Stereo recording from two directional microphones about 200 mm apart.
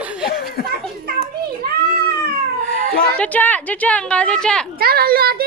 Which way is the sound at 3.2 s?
10° left (ahead or behind).